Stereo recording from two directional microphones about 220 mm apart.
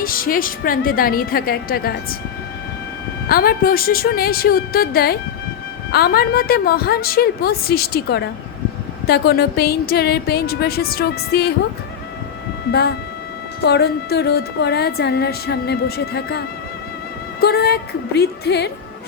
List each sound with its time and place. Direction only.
0.0 s a woman's voice: 40° left (ahead or behind)
3.2 s a woman's voice: 45° left (ahead or behind)
13.7 s a woman's voice: 50° left (ahead or behind)
17.4 s a woman's voice: 45° left (ahead or behind)